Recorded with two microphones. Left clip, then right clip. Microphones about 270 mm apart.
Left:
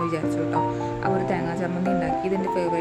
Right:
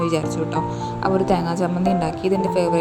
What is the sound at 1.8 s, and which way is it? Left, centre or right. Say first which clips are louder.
Speech: right 2 dB; centre.